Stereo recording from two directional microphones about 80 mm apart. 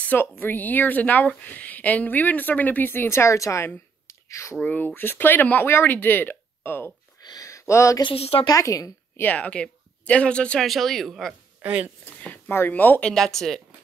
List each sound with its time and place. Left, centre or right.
0.0 s a woman's voice: left
4.1 s a sound: left
4.6 s a woman's voice: left
7.2 s a sound: left
8.5 s a woman's voice: left
9.3 s speech: centre
10.7 s speech: centre
11.6 s speech: centre
12.2 s speech: left
13.1 s speech: centre